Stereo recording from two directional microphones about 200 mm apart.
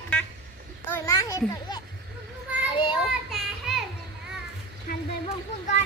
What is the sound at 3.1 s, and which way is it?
Child singing, centre (ahead or behind).